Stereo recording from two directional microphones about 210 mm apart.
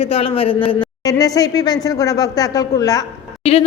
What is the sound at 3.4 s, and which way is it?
Speech, 25° left (ahead or behind).